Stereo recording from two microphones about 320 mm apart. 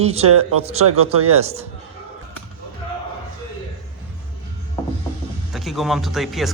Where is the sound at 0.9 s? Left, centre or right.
Right.